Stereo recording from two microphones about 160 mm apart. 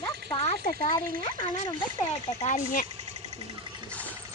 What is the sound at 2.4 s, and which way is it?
Speech, 50° left (ahead or behind).